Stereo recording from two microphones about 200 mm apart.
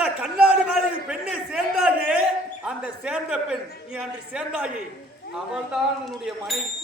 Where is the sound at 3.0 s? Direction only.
5° right (ahead or behind).